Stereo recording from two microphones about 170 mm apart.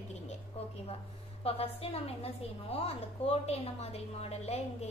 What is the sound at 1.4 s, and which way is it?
Speech, 35° left (ahead or behind).